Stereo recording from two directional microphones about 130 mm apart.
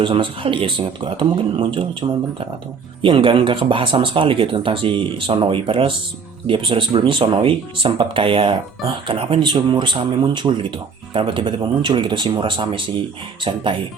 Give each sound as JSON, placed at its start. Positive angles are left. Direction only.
{"t": 0.0, "sound": "speech", "side_deg": -40}